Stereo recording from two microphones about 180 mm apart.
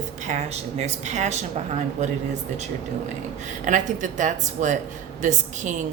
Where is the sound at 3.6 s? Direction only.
45° right (ahead or behind).